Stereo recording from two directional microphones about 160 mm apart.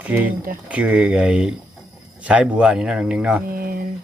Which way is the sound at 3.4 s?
65° right (ahead or behind).